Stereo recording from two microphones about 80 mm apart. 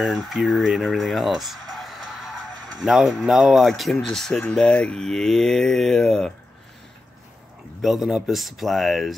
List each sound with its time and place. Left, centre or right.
0.0 s speech: centre
4.4 s speech: centre
7.8 s speech: centre